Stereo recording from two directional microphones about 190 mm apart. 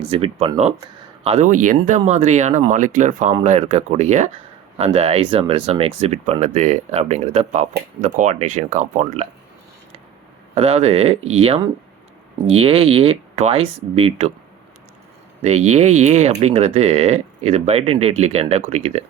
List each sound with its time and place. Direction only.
0.1 s speech: 30° right (ahead or behind)
10.5 s speech: 35° right (ahead or behind)
15.4 s speech: 35° right (ahead or behind)